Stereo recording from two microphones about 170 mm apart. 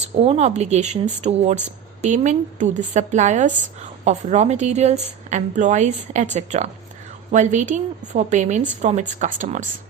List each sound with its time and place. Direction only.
0.2 s speech: 35° right (ahead or behind)